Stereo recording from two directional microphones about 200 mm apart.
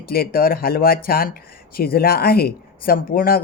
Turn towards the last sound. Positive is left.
turn(degrees=45)  # may be behind; listen again after turning